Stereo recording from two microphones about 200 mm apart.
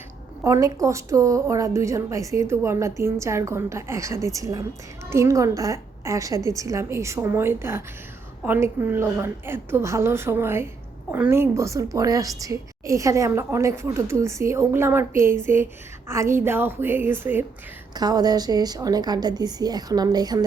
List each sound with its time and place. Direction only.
0.4 s a woman's voice: 15° right (ahead or behind)